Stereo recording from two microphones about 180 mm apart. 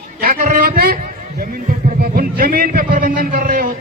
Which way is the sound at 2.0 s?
55° right (ahead or behind).